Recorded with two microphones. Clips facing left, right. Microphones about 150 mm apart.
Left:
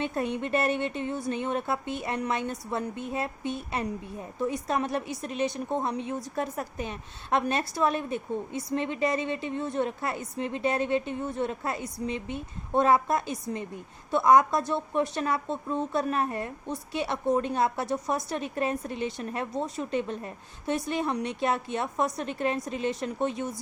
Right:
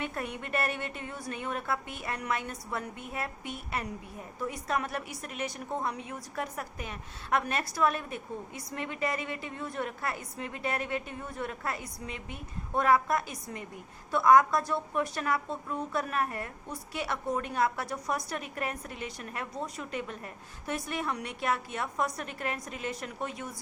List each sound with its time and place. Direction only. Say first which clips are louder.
0.0 s a woman's voice: left 7 dB; 25° left (ahead or behind)